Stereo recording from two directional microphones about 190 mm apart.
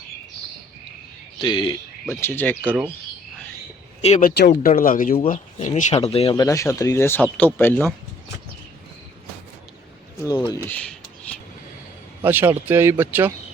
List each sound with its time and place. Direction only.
1.4 s speech: 25° left (ahead or behind)
2.0 s speech: 10° left (ahead or behind)
4.2 s speech: 45° left (ahead or behind); by 7.9 s 10° left (ahead or behind)
10.5 s a sound: 10° left (ahead or behind)
12.2 s speech: 10° right (ahead or behind)